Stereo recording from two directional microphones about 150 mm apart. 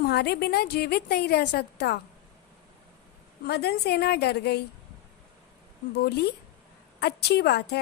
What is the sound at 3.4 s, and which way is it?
A woman's voice, 90° left.